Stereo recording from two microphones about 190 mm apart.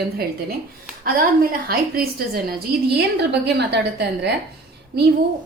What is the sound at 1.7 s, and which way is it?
A woman's voice, 55° right (ahead or behind).